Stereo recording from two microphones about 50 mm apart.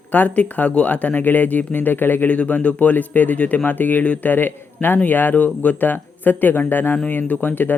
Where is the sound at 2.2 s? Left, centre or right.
Left.